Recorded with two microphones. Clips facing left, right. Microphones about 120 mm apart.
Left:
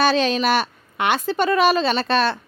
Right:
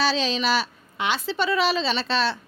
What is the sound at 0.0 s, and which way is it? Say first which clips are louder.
A woman's voice: left 5 dB; 55° left (ahead or behind).